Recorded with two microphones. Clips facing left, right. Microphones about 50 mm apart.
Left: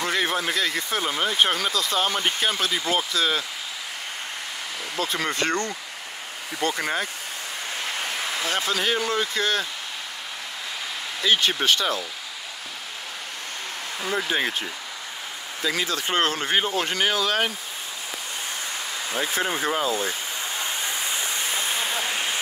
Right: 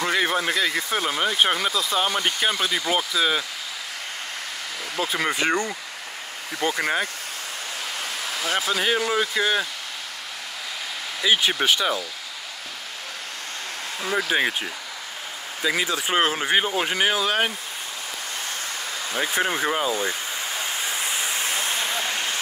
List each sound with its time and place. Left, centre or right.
0.0 s speech: centre
4.9 s speech: centre
8.5 s speech: centre
11.2 s speech: centre
14.0 s speech: centre
19.2 s speech: centre
21.5 s vehicle: centre